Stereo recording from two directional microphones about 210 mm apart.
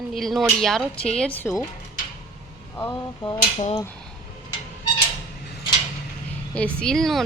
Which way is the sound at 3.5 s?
30° left (ahead or behind).